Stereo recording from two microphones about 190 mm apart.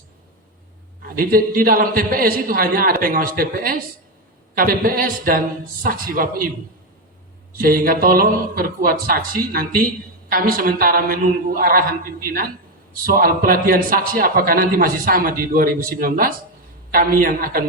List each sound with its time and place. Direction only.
1.0 s a man's voice: 50° right (ahead or behind)
7.6 s a man's voice: 50° right (ahead or behind)